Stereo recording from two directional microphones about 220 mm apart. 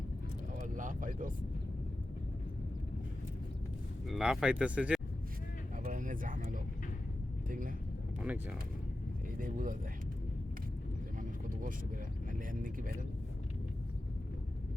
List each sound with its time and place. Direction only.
0.6 s speech: 35° right (ahead or behind)
4.1 s speech: centre (ahead or behind)
5.8 s a sound: 35° right (ahead or behind)
8.2 s speech: 5° right (ahead or behind)
9.4 s speech: 35° right (ahead or behind)
11.2 s vehicle: 40° right (ahead or behind)
12.3 s speech: 35° right (ahead or behind)